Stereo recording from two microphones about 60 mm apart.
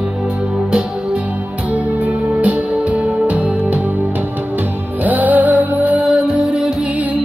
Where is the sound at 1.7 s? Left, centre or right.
Right.